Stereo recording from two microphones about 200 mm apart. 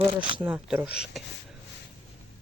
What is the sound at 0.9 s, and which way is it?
Speech, 55° left (ahead or behind).